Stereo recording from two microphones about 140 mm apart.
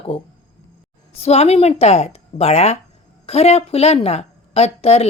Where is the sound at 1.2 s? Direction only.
50° left (ahead or behind).